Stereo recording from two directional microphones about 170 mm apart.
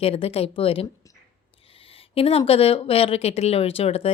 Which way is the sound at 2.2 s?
35° left (ahead or behind).